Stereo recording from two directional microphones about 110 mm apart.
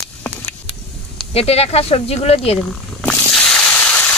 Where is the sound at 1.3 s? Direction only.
65° left (ahead or behind).